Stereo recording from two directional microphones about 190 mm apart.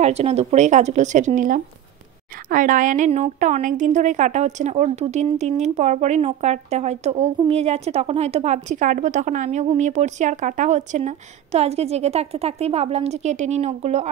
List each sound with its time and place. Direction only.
0.0 s a woman's voice: 35° right (ahead or behind)